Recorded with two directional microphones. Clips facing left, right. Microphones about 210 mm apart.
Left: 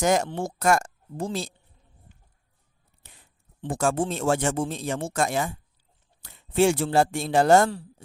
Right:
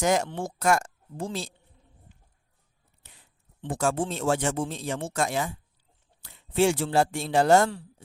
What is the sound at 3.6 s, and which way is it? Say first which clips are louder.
Speech: left 2 dB; 45° left (ahead or behind).